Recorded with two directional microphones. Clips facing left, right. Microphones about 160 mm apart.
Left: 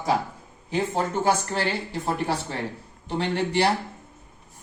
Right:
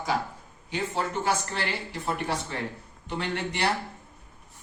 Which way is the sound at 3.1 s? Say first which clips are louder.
Left 6 dB; 30° left (ahead or behind).